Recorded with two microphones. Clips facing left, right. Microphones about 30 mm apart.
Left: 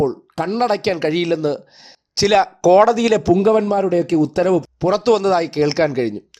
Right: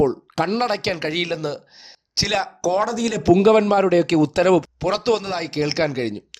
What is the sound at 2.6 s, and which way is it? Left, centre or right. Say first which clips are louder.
Speech: left 11 dB; left.